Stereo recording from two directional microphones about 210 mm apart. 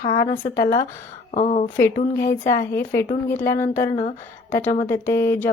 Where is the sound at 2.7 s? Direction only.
10° left (ahead or behind).